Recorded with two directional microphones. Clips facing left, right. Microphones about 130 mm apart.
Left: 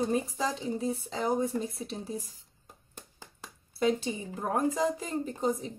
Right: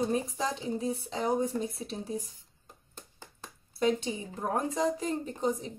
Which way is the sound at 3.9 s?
Centre (ahead or behind).